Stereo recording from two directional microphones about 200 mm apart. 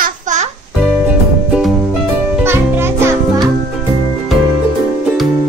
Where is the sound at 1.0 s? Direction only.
5° right (ahead or behind).